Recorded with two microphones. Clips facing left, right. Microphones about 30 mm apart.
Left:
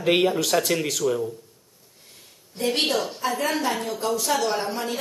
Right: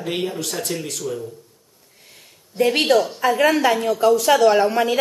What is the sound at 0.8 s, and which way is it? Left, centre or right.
Speech, left.